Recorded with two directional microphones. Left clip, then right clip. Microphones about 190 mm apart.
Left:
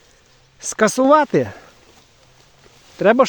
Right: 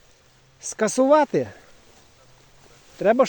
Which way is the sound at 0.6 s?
35° left (ahead or behind).